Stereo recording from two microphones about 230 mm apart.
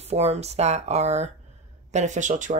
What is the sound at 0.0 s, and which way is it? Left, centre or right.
A woman's voice, right.